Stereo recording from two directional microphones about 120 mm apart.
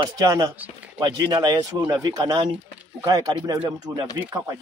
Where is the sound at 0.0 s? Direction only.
35° right (ahead or behind).